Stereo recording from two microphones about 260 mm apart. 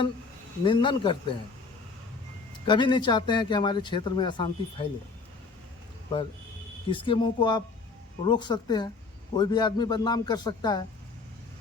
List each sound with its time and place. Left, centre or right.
0.6 s a man's voice: centre
2.6 s a man's voice: centre
6.1 s a man's voice: centre